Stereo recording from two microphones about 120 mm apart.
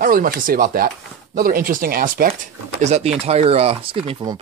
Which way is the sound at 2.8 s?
70° right (ahead or behind).